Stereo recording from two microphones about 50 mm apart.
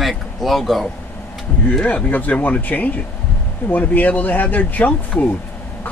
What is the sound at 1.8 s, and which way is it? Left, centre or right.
Speech, left.